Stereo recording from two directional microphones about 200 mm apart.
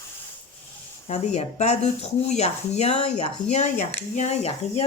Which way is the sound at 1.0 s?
35° left (ahead or behind).